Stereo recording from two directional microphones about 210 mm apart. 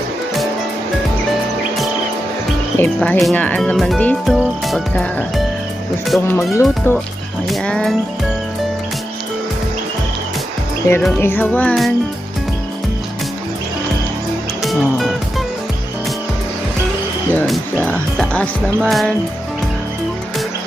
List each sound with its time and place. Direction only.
2.7 s speech: 10° left (ahead or behind)
7.4 s speech: centre (ahead or behind)
10.8 s speech: 15° left (ahead or behind)
14.6 s music: centre (ahead or behind)
17.5 s speech: 5° left (ahead or behind)